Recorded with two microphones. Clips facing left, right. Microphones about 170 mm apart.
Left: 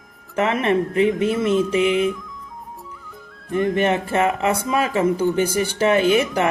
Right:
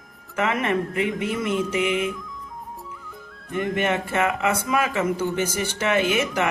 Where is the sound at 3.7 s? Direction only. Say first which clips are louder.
Left 2 dB; 30° left (ahead or behind).